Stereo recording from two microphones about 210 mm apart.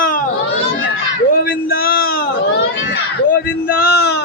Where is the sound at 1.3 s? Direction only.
45° left (ahead or behind).